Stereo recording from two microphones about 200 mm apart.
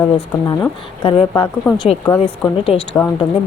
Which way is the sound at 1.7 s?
15° left (ahead or behind).